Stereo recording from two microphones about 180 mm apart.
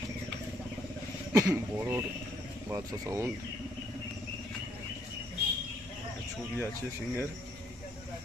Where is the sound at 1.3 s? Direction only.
15° right (ahead or behind).